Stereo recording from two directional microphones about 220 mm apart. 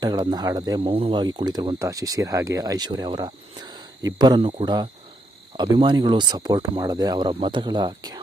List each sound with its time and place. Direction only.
0.0 s speech: 20° right (ahead or behind)